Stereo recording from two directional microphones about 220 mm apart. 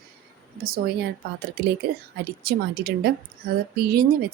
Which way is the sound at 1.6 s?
45° right (ahead or behind).